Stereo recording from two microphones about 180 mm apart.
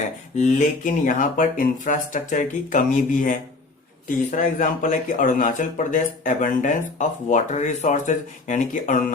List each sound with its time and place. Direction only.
0.3 s speech: 45° left (ahead or behind)